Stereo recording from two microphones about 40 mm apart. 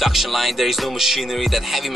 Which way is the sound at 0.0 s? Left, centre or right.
Centre.